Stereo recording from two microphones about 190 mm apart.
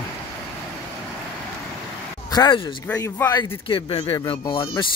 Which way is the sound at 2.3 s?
25° left (ahead or behind).